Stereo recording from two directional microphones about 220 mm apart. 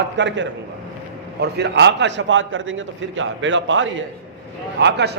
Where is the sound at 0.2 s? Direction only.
55° right (ahead or behind).